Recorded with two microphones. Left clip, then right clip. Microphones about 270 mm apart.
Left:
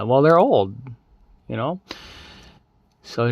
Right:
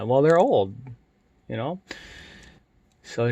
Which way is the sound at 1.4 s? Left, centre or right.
Centre.